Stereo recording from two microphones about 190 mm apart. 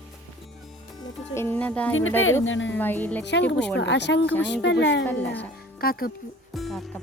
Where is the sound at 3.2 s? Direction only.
65° left (ahead or behind).